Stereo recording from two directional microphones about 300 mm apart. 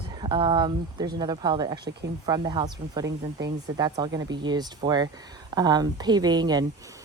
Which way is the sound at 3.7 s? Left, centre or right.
Centre.